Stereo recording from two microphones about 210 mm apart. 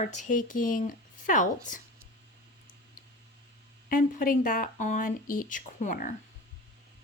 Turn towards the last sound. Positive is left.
turn(degrees=40)  # may be behind; listen again after turning